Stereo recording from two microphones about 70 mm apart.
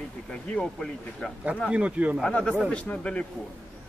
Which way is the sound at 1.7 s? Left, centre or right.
Centre.